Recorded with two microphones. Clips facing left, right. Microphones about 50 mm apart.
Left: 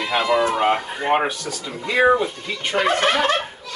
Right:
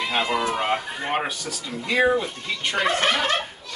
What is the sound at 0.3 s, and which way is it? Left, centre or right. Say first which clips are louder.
Speech: left 5 dB; left.